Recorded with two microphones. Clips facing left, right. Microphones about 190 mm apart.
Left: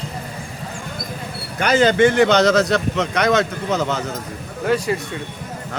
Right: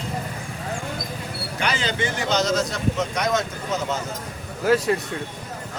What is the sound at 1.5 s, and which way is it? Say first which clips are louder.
Speech: left 11 dB; 45° left (ahead or behind).